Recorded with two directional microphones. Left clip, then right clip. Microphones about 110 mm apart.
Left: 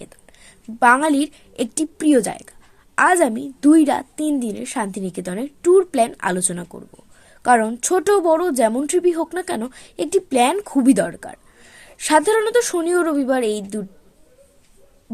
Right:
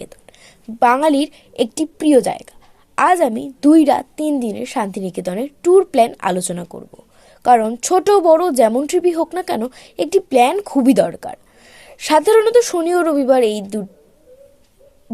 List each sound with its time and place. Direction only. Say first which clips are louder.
0.3 s a woman's voice: right 3 dB; 20° right (ahead or behind)